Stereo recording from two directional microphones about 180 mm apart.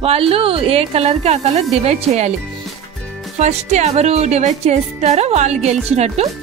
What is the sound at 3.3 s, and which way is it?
Speech, 40° right (ahead or behind).